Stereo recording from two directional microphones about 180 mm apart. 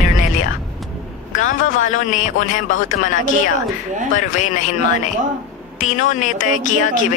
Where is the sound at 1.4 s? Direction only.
90° left.